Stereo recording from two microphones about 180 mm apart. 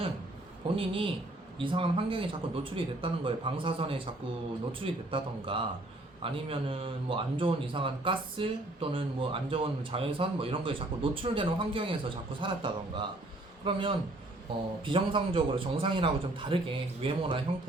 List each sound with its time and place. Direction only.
0.8 s a man's voice: 30° right (ahead or behind)